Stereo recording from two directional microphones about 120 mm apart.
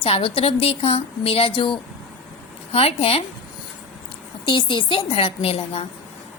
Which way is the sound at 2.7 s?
55° left (ahead or behind).